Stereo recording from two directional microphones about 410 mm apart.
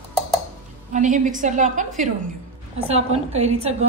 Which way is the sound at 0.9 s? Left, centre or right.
Centre.